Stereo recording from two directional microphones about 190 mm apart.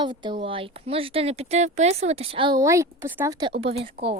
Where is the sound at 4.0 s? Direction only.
55° right (ahead or behind).